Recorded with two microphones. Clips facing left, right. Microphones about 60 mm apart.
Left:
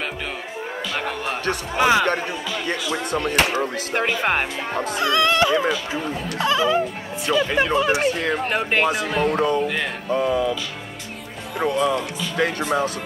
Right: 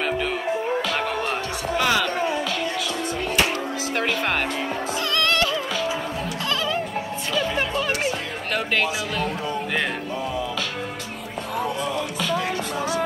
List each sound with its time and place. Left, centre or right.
1.8 s speech: left
2.9 s music: left
3.5 s speech: left
5.0 s music: centre
6.4 s a child's voice: centre
7.3 s speech: left
7.7 s a child's voice: centre
8.0 s music: left
8.5 s speech: left
9.3 s music: left
11.6 s music: left